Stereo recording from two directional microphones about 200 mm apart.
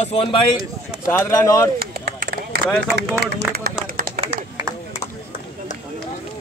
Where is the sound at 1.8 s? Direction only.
50° right (ahead or behind).